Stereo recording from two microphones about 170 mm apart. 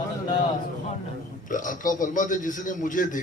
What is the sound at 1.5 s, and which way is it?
A man's voice, 50° left (ahead or behind).